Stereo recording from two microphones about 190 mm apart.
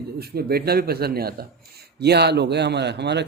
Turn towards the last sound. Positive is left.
turn(degrees=-65)  # may be behind; listen again after turning